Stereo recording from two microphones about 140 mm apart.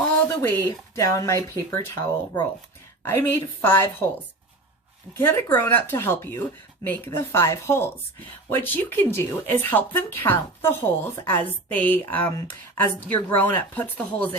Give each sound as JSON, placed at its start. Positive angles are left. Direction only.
{"t": 0.3, "sound": "speech", "side_deg": 25}
{"t": 5.1, "sound": "speech", "side_deg": 15}